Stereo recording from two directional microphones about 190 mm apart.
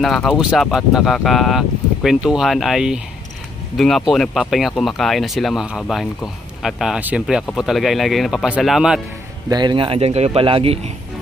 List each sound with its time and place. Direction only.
0.0 s speech: centre (ahead or behind)
9.5 s speech: 25° right (ahead or behind)